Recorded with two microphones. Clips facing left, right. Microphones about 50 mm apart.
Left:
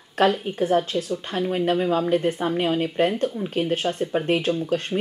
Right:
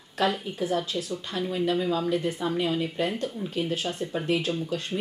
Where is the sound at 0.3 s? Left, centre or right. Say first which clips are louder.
Left 6 dB; left.